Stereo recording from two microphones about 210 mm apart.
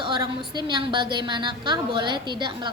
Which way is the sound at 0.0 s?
20° right (ahead or behind).